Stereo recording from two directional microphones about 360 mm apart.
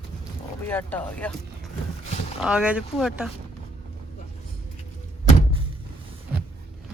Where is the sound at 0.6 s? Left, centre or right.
Centre.